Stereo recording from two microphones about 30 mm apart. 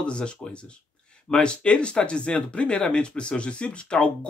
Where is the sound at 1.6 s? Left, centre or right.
Left.